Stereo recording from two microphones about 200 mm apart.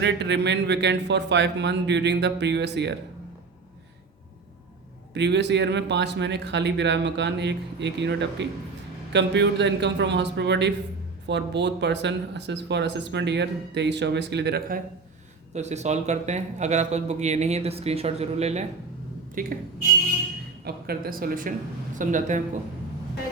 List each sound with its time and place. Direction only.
0.0 s speech: 60° right (ahead or behind)
5.1 s speech: 60° right (ahead or behind)
15.5 s speech: 35° right (ahead or behind)
19.3 s speech: 45° right (ahead or behind)
20.7 s speech: 50° right (ahead or behind)